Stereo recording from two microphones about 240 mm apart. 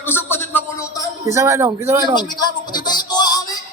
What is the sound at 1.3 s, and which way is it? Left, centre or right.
Speech, centre.